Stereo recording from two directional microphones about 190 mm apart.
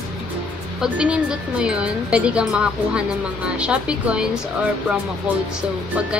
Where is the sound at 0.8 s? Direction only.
5° right (ahead or behind).